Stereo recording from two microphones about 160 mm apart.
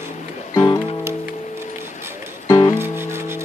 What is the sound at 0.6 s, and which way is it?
Music, 25° left (ahead or behind).